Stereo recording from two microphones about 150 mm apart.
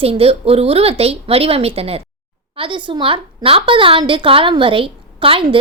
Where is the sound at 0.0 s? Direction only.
40° right (ahead or behind).